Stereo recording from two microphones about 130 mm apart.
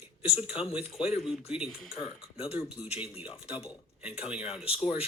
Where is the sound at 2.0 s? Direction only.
40° left (ahead or behind).